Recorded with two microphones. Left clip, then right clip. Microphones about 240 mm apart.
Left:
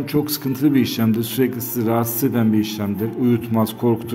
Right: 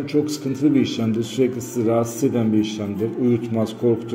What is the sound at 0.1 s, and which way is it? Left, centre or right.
A man's voice, left.